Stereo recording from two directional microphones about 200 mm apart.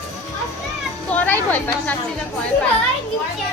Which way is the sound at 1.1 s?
10° left (ahead or behind).